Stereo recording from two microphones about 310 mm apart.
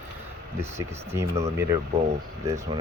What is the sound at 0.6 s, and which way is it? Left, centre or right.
Speech, centre.